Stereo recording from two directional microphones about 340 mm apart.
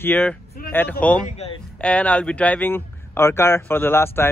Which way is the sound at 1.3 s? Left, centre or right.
Centre.